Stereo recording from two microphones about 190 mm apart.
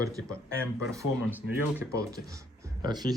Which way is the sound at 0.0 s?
15° right (ahead or behind).